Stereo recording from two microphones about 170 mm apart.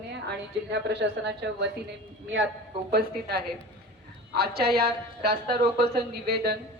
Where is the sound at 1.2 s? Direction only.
80° right.